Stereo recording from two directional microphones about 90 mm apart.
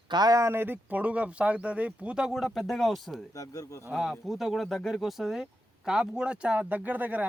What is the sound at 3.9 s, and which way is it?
Speech, centre (ahead or behind).